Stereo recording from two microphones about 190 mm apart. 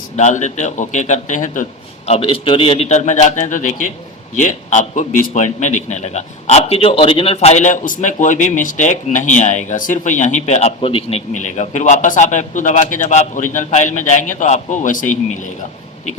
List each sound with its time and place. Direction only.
0.2 s a man's voice: 40° left (ahead or behind)
2.0 s a man's voice: 30° left (ahead or behind)